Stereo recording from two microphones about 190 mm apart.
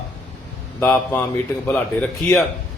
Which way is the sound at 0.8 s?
5° left (ahead or behind).